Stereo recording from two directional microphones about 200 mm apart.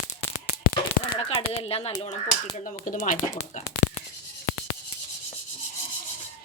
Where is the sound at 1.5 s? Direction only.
30° left (ahead or behind).